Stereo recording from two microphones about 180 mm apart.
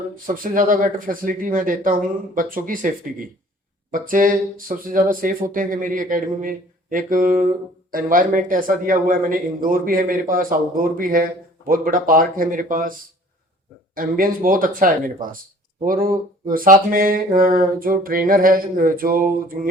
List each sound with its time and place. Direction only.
0.3 s speech: 50° right (ahead or behind)